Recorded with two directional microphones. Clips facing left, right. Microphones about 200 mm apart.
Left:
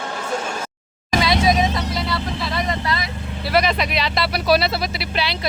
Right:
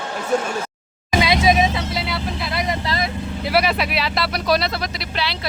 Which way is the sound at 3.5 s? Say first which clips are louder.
Left 1 dB; 10° right (ahead or behind).